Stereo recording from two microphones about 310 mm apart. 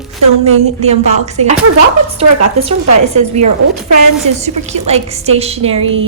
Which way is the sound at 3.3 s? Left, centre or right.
Right.